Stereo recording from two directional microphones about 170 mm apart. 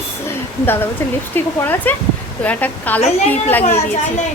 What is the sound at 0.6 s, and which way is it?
A woman's voice, 10° left (ahead or behind).